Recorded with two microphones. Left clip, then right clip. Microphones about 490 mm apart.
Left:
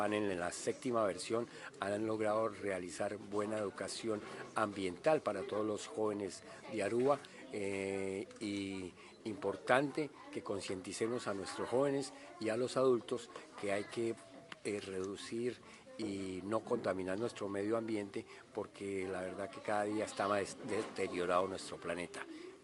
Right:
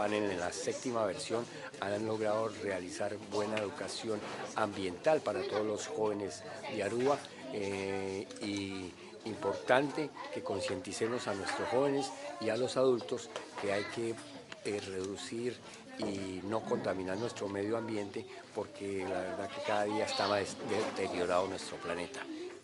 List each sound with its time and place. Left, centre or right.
0.0 s speech: left